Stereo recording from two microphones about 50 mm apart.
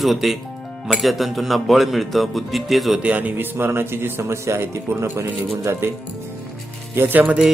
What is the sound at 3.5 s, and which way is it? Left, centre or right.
Speech, right.